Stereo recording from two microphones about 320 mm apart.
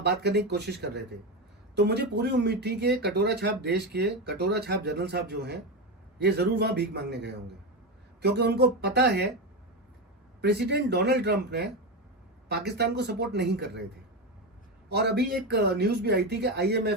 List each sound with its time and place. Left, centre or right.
0.0 s speech: right
10.4 s speech: right
14.8 s speech: right